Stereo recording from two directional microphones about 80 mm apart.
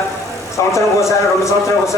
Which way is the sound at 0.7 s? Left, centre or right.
Left.